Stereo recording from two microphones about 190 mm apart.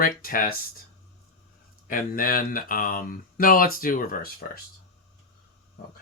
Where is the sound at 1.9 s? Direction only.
45° left (ahead or behind).